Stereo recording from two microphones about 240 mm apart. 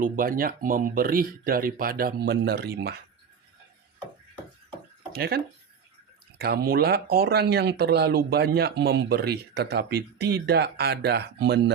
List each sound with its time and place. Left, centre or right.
0.0 s speech: right
5.1 s speech: right
6.4 s speech: right